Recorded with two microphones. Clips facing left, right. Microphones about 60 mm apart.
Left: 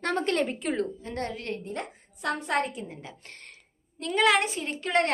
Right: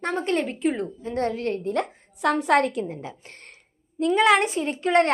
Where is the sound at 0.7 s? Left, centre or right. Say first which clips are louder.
Right 1 dB; centre.